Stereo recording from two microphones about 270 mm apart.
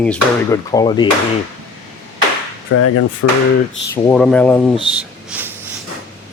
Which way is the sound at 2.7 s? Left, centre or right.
Left.